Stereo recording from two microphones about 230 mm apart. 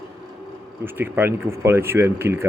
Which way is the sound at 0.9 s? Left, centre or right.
Centre.